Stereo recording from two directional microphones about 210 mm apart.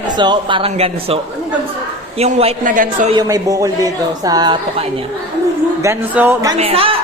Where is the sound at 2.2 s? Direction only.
30° right (ahead or behind).